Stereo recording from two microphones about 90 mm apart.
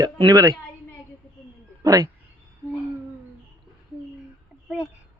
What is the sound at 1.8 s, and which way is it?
Speech, 45° right (ahead or behind).